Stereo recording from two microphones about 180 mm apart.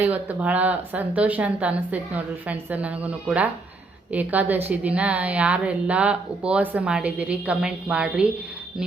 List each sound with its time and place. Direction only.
0.0 s a woman's voice: 10° right (ahead or behind)